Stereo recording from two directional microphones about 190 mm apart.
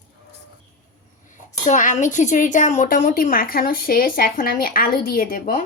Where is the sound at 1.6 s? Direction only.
40° left (ahead or behind).